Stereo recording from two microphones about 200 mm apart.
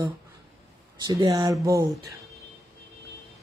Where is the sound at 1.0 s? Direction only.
20° right (ahead or behind).